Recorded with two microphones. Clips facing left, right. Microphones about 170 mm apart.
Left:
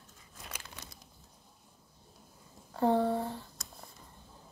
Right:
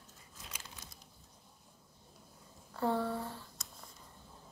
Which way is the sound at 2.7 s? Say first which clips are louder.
Left 6 dB; 25° left (ahead or behind).